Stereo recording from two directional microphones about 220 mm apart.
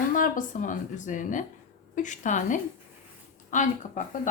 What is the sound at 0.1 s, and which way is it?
A woman's voice, 35° left (ahead or behind).